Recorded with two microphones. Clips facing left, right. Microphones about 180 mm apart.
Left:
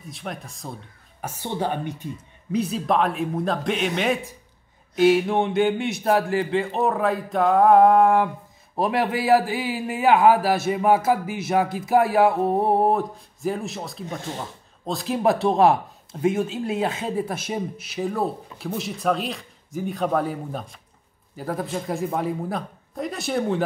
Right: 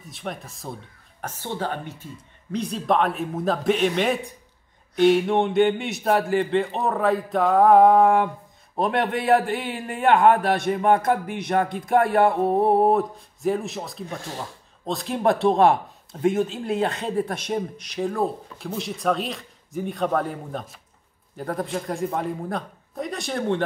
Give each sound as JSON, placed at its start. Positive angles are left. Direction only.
{"t": 0.0, "sound": "speech", "side_deg": 0}
{"t": 1.2, "sound": "speech", "side_deg": 15}
{"t": 2.5, "sound": "speech", "side_deg": 5}